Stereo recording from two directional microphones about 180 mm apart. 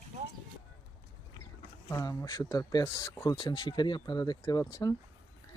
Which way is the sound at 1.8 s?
20° left (ahead or behind).